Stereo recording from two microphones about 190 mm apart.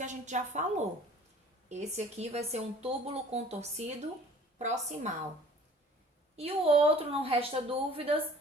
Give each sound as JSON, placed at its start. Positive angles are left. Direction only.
{"t": 0.0, "sound": "speech", "side_deg": -40}
{"t": 6.3, "sound": "speech", "side_deg": -30}